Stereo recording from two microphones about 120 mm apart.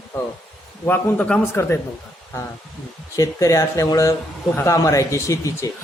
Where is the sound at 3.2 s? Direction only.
30° left (ahead or behind).